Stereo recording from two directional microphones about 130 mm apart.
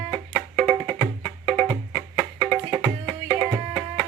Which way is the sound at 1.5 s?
20° right (ahead or behind).